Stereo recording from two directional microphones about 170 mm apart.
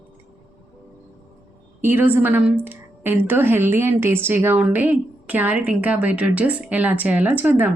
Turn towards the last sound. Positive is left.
turn(degrees=-10)  # may be behind; listen again after turning